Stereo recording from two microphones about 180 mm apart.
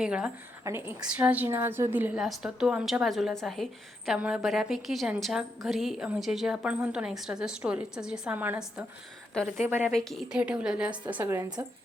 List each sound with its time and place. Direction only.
0.0 s a woman's voice: 5° right (ahead or behind)
9.6 s a woman's voice: 10° right (ahead or behind)
9.9 s a woman's voice: centre (ahead or behind); by 11.6 s 20° right (ahead or behind)